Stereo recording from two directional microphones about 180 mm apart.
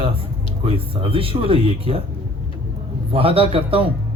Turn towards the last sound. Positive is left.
turn(degrees=-30)  # may be behind; listen again after turning